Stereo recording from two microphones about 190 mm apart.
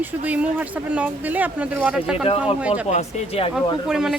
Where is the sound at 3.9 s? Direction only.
5° right (ahead or behind).